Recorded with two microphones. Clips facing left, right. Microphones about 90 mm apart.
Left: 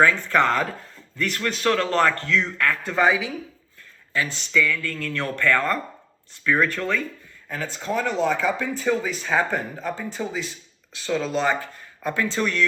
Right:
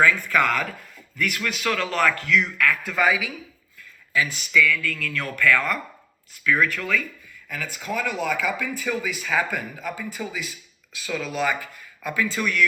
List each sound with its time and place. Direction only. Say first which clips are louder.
0.0 s speech: left 1 dB; 30° left (ahead or behind)
4.5 s speech: right 1 dB; 30° left (ahead or behind)